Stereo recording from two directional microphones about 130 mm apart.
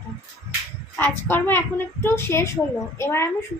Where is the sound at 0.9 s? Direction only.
15° left (ahead or behind).